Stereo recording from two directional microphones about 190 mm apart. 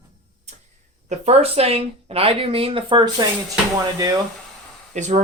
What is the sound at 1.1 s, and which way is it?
Speech, 35° right (ahead or behind).